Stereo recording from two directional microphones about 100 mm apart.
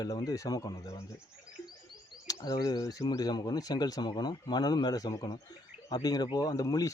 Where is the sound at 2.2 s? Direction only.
40° left (ahead or behind).